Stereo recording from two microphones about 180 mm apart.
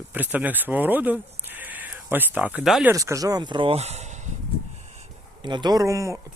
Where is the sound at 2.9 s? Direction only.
15° right (ahead or behind); by 4.1 s 35° right (ahead or behind).